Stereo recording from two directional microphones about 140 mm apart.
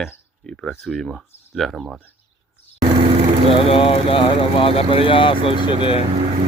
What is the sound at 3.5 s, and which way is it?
Speech, 40° left (ahead or behind).